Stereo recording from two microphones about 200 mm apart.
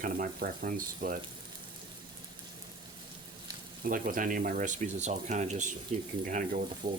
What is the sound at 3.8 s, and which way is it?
Speech, 45° right (ahead or behind).